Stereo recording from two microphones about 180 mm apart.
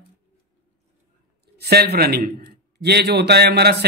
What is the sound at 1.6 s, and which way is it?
A man's voice, 60° right (ahead or behind).